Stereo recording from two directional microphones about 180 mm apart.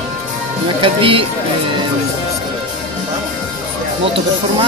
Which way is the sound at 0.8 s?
30° right (ahead or behind).